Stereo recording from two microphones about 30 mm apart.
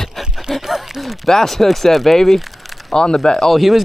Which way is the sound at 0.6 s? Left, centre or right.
Centre.